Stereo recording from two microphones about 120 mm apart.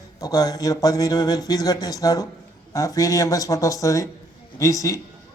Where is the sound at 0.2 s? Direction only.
30° left (ahead or behind).